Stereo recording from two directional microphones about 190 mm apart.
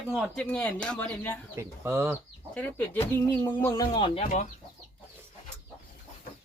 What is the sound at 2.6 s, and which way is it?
Speech, 10° left (ahead or behind).